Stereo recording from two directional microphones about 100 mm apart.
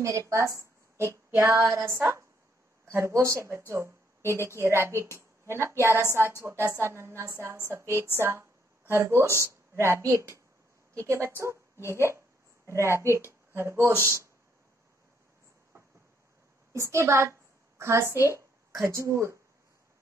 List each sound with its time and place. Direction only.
0.0 s a woman's voice: 30° right (ahead or behind)
16.7 s a woman's voice: 30° right (ahead or behind)